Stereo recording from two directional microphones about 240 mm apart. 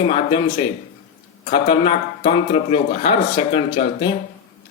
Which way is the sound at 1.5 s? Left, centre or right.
Left.